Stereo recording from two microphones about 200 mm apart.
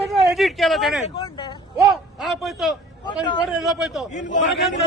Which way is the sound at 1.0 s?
25° left (ahead or behind).